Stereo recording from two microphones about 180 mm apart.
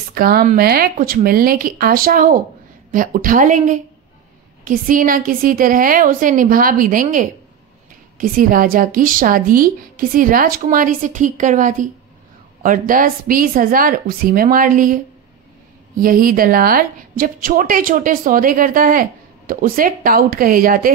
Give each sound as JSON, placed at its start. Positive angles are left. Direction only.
{"t": 0.1, "sound": "a woman's voice", "side_deg": -55}
{"t": 16.0, "sound": "a woman's voice", "side_deg": -50}